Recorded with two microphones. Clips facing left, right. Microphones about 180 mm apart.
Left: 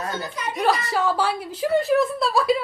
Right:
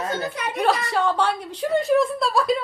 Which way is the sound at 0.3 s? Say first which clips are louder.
Right 1 dB; 60° right (ahead or behind).